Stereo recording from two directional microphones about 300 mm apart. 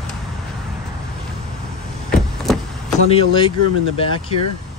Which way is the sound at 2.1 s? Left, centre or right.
Centre.